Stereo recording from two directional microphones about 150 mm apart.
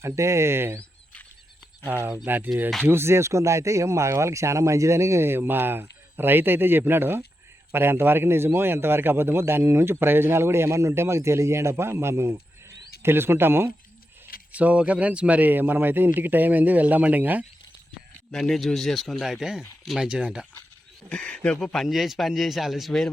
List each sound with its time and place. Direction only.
0.0 s a man's voice: 20° right (ahead or behind)
1.9 s a man's voice: 15° right (ahead or behind)
18.3 s speech: centre (ahead or behind)
21.1 s speech: 5° left (ahead or behind)